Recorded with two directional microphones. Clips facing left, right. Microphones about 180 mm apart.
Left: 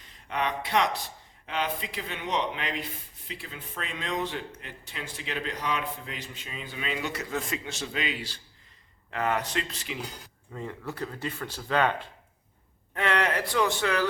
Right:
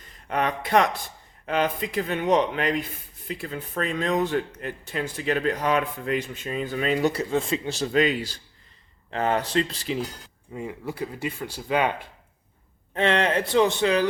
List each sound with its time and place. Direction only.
0.3 s speech: 50° right (ahead or behind)
9.0 s speech: 30° right (ahead or behind)
10.5 s speech: 10° right (ahead or behind)
12.9 s speech: 25° right (ahead or behind)